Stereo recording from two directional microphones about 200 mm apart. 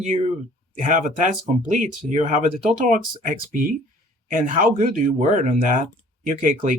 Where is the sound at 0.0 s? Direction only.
35° right (ahead or behind).